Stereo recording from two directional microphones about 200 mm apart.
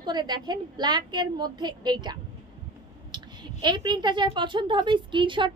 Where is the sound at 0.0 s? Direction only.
20° right (ahead or behind).